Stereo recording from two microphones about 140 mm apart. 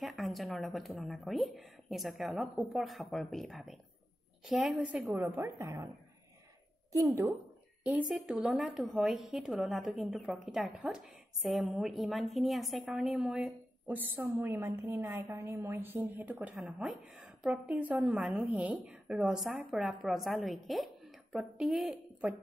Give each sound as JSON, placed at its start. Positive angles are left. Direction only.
{"t": 0.0, "sound": "a woman's voice", "side_deg": 0}
{"t": 5.3, "sound": "a woman's voice", "side_deg": -20}
{"t": 6.9, "sound": "a woman's voice", "side_deg": -25}
{"t": 7.8, "sound": "a woman's voice", "side_deg": -5}
{"t": 16.3, "sound": "a woman's voice", "side_deg": 0}